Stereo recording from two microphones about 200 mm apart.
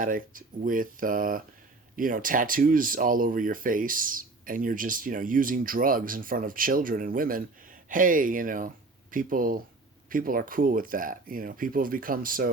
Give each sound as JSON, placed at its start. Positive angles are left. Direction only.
{"t": 0.0, "sound": "speech", "side_deg": -45}